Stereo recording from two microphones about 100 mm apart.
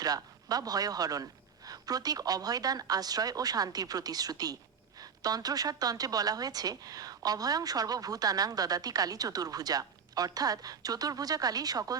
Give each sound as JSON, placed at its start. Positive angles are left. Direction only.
{"t": 0.0, "sound": "a woman's voice", "side_deg": -40}